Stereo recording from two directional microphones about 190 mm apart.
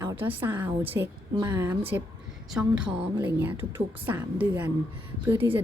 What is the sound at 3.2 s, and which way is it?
A woman's voice, 10° right (ahead or behind).